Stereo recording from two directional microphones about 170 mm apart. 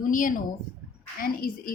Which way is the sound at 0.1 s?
50° left (ahead or behind).